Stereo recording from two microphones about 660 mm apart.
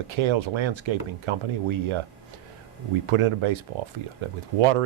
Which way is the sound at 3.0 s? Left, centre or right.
Right.